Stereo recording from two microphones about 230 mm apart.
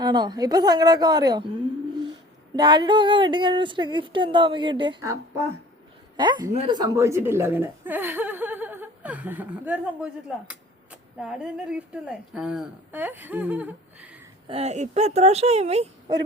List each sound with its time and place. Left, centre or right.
0.0 s speech: centre
2.6 s a woman's voice: centre
14.4 s speech: right